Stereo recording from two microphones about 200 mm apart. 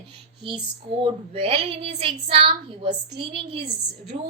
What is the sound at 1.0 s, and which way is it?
A woman's voice, 30° right (ahead or behind).